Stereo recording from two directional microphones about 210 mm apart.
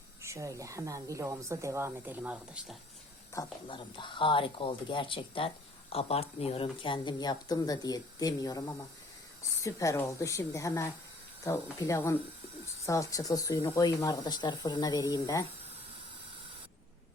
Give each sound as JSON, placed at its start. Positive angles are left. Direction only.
{"t": 0.2, "sound": "a woman's voice", "side_deg": -15}
{"t": 3.3, "sound": "speech", "side_deg": 25}